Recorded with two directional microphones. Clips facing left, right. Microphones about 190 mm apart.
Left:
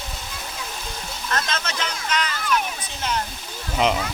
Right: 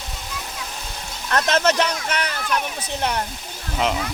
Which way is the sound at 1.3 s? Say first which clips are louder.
Right 9 dB; 65° right (ahead or behind).